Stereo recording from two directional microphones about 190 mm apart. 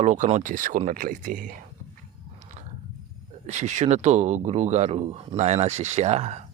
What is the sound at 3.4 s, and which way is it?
Speech, 40° right (ahead or behind).